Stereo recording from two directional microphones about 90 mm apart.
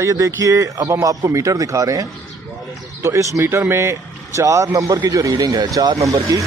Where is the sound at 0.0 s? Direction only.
35° right (ahead or behind).